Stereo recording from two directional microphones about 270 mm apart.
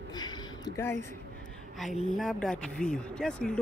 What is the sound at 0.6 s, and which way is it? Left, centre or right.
Speech, centre.